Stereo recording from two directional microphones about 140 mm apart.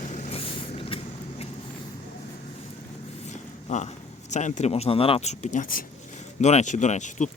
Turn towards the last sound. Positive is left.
turn(degrees=60)  # may be behind; listen again after turning